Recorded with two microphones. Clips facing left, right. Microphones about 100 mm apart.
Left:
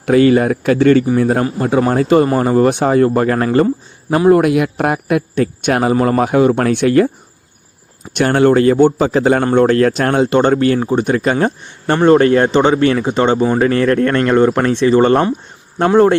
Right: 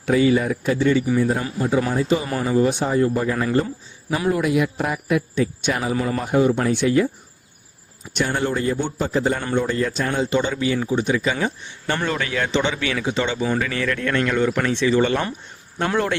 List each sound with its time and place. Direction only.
0.0 s a man's voice: 65° left (ahead or behind)
8.1 s a man's voice: 75° left (ahead or behind); by 15.2 s 45° left (ahead or behind)